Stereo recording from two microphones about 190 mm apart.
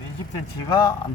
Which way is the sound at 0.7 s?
20° left (ahead or behind).